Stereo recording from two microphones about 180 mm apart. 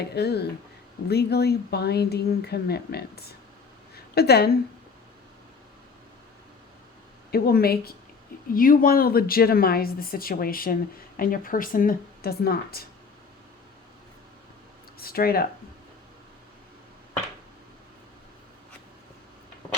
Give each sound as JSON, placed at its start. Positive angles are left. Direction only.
{"t": 0.0, "sound": "speech", "side_deg": 65}
{"t": 3.9, "sound": "a sound", "side_deg": 60}
{"t": 7.3, "sound": "speech", "side_deg": 60}
{"t": 14.9, "sound": "speech", "side_deg": 55}